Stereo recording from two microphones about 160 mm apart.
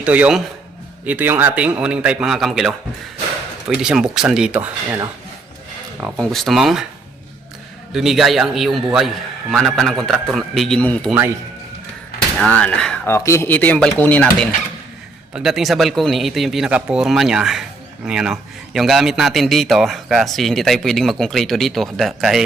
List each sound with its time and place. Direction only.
0.0 s a man's voice: 10° right (ahead or behind)
3.8 s speech: 5° right (ahead or behind)
6.1 s speech: 5° left (ahead or behind)
7.9 s speech: centre (ahead or behind)
12.4 s speech: 10° left (ahead or behind)
13.1 s speech: 15° left (ahead or behind)
15.3 s speech: 5° right (ahead or behind)